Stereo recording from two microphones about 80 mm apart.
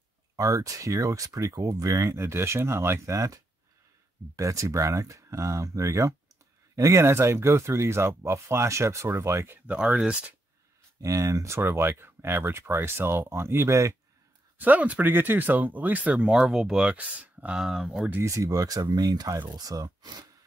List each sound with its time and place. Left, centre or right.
0.4 s speech: right
3.1 s speech: right
9.8 s speech: centre
11.0 s speech: right
11.5 s speech: right
14.6 s speech: centre
16.3 s speech: centre
17.6 s speech: centre
18.2 s speech: right